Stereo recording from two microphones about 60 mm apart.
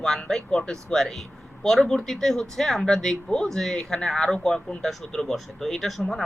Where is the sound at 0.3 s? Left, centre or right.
Centre.